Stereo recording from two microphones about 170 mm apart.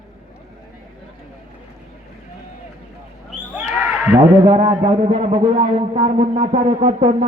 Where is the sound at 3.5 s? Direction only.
15° right (ahead or behind).